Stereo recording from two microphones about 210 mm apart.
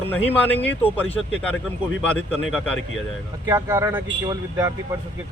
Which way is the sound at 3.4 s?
15° right (ahead or behind).